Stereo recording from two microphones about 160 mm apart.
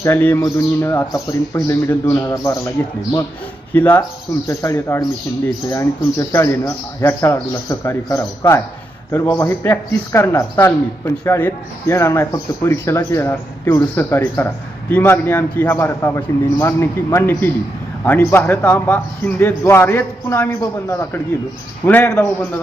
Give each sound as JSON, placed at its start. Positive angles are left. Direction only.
{"t": 0.0, "sound": "a man's voice", "side_deg": 15}